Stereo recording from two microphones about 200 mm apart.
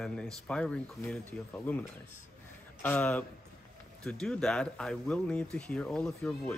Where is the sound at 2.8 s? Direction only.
5° left (ahead or behind).